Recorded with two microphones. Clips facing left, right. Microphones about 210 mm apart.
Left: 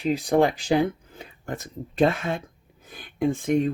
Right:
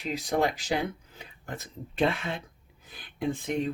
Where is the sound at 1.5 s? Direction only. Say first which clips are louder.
Left 6 dB; 45° left (ahead or behind).